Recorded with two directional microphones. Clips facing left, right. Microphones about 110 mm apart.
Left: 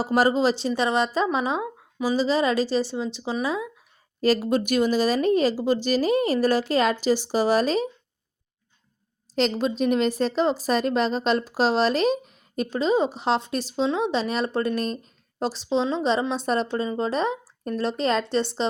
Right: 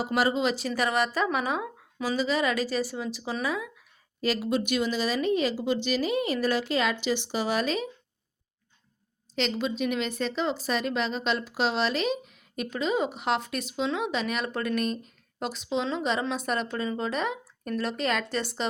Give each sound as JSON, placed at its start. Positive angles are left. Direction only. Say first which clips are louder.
{"t": 0.0, "sound": "speech", "louder": "left 5 dB", "side_deg": 40}
{"t": 4.2, "sound": "a woman's voice", "louder": "left 6 dB", "side_deg": 40}
{"t": 9.3, "sound": "a woman's voice", "louder": "left 5 dB", "side_deg": 40}